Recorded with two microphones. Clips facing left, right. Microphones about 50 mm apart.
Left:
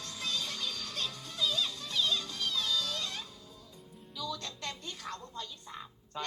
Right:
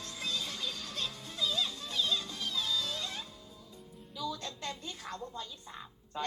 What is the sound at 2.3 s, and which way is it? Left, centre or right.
Music, left.